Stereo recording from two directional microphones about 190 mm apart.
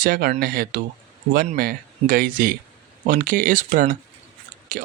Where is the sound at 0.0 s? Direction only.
50° right (ahead or behind).